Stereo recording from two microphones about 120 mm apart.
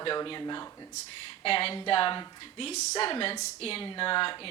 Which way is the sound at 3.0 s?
50° left (ahead or behind).